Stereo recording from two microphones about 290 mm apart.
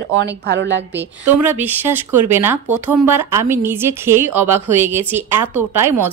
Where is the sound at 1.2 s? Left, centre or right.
Centre.